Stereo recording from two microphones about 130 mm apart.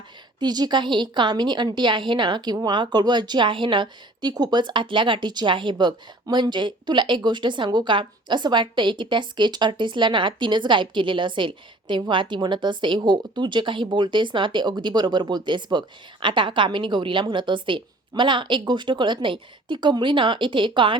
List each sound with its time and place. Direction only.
0.3 s speech: 35° right (ahead or behind)